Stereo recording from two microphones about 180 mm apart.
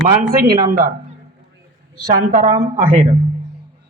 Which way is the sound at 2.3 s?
45° right (ahead or behind).